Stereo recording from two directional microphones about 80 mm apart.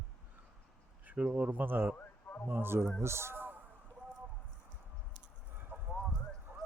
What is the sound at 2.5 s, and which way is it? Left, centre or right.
Speech, right.